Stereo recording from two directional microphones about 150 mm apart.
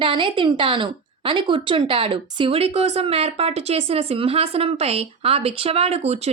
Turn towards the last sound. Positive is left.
turn(degrees=-45)  # may be behind; listen again after turning